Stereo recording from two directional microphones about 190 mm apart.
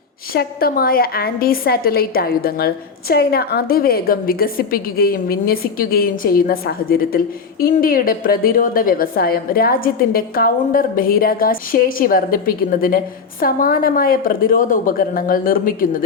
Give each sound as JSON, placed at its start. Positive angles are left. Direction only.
{"t": 0.3, "sound": "a woman's voice", "side_deg": 50}